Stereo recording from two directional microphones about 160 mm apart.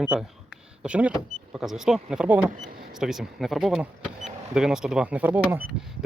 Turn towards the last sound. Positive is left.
turn(degrees=-10)  # may be behind; listen again after turning